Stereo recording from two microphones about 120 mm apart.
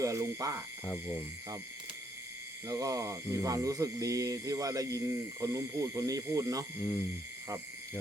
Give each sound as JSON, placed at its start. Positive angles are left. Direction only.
{"t": 0.0, "sound": "speech", "side_deg": -25}
{"t": 0.9, "sound": "speech", "side_deg": 15}
{"t": 2.6, "sound": "a sound", "side_deg": -30}